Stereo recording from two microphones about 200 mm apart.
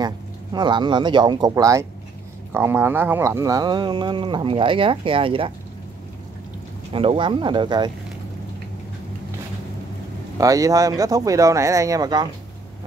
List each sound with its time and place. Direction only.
0.0 s speech: 20° right (ahead or behind)
6.9 s speech: 25° right (ahead or behind)
10.4 s speech: 15° right (ahead or behind)